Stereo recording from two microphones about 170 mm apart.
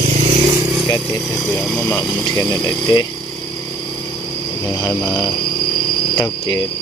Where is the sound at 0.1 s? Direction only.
40° right (ahead or behind).